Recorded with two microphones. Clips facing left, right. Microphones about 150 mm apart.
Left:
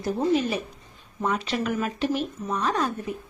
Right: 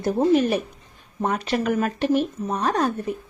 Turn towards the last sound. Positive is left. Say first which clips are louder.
# right 3 dB
turn(degrees=-55)  # may be behind; listen again after turning